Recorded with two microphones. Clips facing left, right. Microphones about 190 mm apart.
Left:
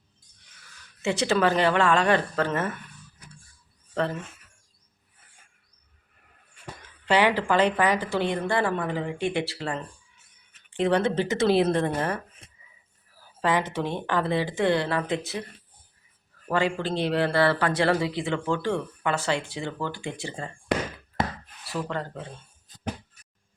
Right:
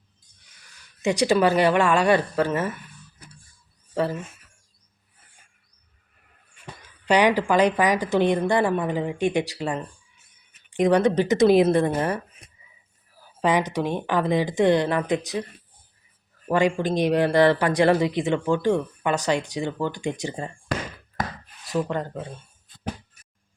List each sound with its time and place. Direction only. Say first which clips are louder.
1.0 s speech: right 3 dB; 15° right (ahead or behind)
3.9 s speech: right 3 dB; 10° right (ahead or behind)
7.0 s speech: right 3 dB; 15° right (ahead or behind)
13.4 s speech: right 3 dB; 15° right (ahead or behind)
16.5 s speech: right 4 dB; 15° right (ahead or behind)
21.7 s speech: right 5 dB; 15° right (ahead or behind)
22.7 s a sound: left 2 dB; 40° left (ahead or behind)